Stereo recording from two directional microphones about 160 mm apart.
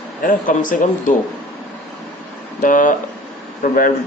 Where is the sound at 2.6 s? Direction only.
55° left (ahead or behind).